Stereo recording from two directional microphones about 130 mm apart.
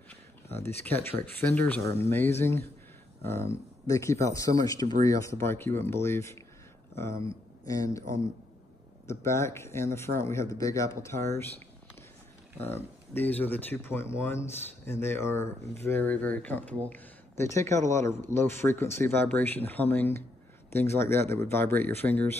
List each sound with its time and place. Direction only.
0.6 s speech: 15° left (ahead or behind)
7.6 s speech: 25° left (ahead or behind)
9.0 s speech: 20° left (ahead or behind)
12.5 s speech: 15° left (ahead or behind)